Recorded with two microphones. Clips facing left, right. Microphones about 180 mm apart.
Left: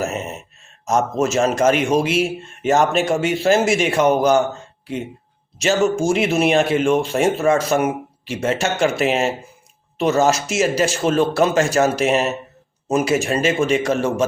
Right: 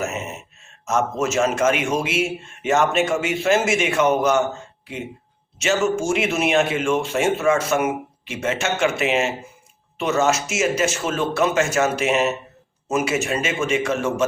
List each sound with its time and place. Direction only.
0.0 s a sound: 35° left (ahead or behind)
0.9 s a man's voice: 35° left (ahead or behind)
5.5 s a man's voice: 35° left (ahead or behind)